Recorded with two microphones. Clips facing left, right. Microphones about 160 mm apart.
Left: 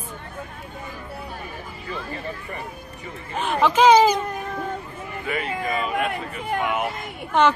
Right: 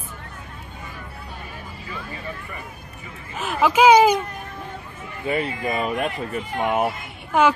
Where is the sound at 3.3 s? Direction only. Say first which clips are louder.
Even; 5° right (ahead or behind).